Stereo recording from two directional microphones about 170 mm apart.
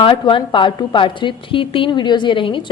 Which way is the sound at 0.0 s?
30° left (ahead or behind).